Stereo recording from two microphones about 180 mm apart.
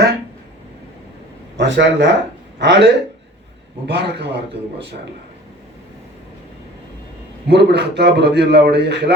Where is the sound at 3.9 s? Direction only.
65° right (ahead or behind).